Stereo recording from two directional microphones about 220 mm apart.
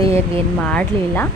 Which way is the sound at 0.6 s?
5° left (ahead or behind).